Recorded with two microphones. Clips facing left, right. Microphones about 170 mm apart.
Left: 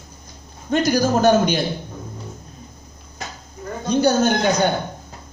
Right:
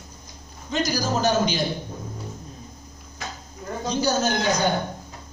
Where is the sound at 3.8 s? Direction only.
55° left (ahead or behind).